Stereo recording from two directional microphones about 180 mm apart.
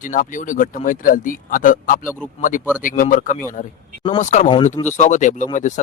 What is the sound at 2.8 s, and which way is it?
Speech, 50° left (ahead or behind).